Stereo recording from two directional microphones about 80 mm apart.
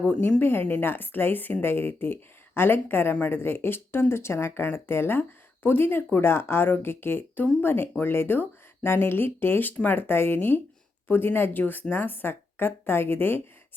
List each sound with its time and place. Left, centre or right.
0.1 s speech: centre